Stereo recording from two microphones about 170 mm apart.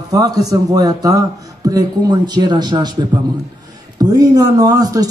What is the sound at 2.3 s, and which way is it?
Speech, 25° right (ahead or behind).